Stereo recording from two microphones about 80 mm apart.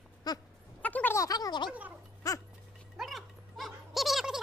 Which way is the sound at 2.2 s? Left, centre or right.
Left.